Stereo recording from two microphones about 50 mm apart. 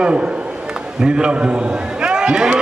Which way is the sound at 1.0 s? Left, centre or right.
Centre.